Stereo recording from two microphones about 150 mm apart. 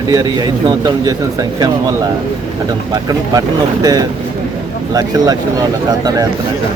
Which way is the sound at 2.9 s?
25° right (ahead or behind).